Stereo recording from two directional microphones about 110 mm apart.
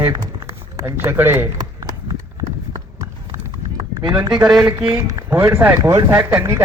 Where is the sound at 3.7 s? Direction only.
45° right (ahead or behind).